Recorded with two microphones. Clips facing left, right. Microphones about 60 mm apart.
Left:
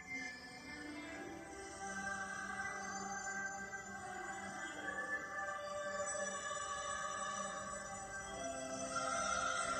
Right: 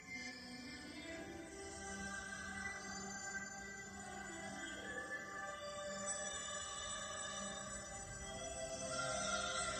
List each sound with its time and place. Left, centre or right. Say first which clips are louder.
6.9 s music: left 6 dB; left
8.8 s music: left 3 dB; left